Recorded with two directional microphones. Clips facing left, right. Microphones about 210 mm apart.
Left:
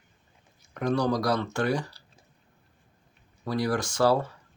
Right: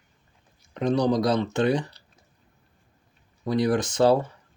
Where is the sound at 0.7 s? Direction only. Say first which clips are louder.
Right 3 dB; 20° right (ahead or behind).